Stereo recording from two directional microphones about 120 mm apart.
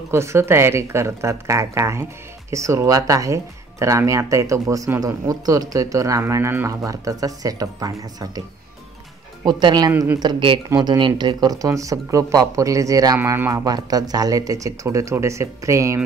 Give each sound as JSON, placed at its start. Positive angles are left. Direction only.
{"t": 0.1, "sound": "speech", "side_deg": -20}
{"t": 13.2, "sound": "speech", "side_deg": -20}
{"t": 13.5, "sound": "speech", "side_deg": -30}